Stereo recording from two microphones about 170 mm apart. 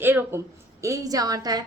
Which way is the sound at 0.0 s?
10° right (ahead or behind).